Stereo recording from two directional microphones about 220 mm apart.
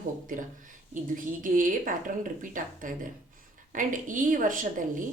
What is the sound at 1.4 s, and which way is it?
A woman's voice, 35° right (ahead or behind).